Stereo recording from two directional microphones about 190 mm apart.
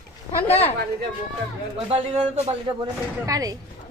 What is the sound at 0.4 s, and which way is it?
Speech, 30° left (ahead or behind).